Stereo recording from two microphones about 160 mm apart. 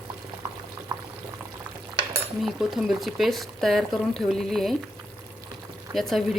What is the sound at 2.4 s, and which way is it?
Speech, centre (ahead or behind).